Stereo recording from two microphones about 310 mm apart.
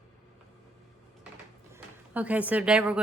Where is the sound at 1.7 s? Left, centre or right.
Centre.